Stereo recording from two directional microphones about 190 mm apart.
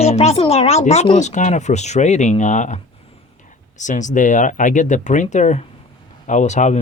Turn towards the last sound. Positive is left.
turn(degrees=40)  # may be behind; listen again after turning